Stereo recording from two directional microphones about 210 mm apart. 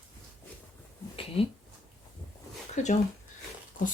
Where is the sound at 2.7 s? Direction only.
35° left (ahead or behind).